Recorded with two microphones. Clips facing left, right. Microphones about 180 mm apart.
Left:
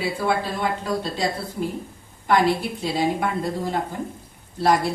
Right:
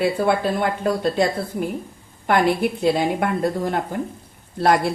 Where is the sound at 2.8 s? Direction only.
60° right (ahead or behind).